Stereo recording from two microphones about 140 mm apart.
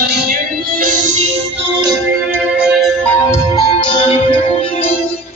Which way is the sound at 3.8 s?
40° left (ahead or behind).